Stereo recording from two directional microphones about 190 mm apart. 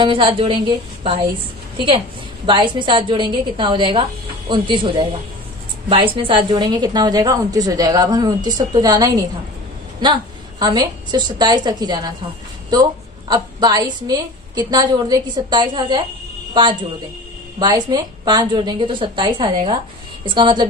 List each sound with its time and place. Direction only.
0.0 s a woman's voice: 25° right (ahead or behind)
13.3 s a woman's voice: 20° right (ahead or behind)
17.6 s a woman's voice: 20° right (ahead or behind)